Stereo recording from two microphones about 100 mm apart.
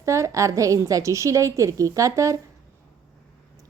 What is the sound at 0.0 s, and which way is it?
A woman's voice, 30° right (ahead or behind).